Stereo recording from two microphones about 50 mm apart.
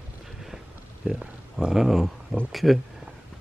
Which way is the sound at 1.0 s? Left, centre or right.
Right.